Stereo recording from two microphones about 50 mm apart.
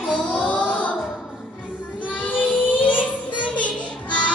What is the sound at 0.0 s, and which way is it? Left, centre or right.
Music, centre.